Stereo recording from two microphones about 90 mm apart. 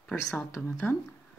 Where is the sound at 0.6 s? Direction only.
25° left (ahead or behind).